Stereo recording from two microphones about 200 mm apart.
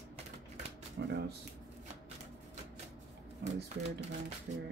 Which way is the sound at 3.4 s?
60° right (ahead or behind).